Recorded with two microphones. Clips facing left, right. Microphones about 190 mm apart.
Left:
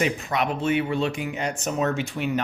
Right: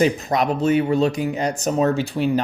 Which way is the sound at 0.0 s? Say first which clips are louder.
Right 6 dB; 40° right (ahead or behind).